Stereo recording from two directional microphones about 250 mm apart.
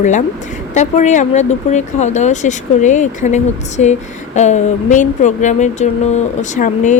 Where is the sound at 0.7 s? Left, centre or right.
Left.